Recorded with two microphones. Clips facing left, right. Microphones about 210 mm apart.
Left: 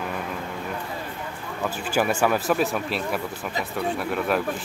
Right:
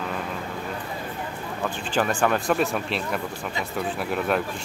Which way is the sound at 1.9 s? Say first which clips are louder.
Left 1 dB; 10° left (ahead or behind).